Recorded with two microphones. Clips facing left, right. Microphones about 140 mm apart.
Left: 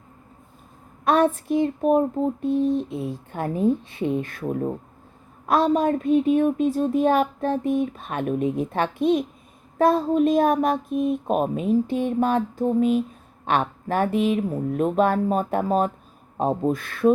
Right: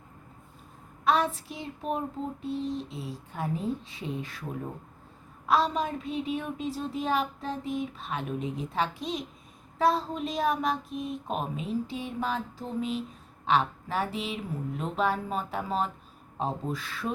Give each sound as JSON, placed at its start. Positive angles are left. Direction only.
{"t": 1.0, "sound": "speech", "side_deg": 50}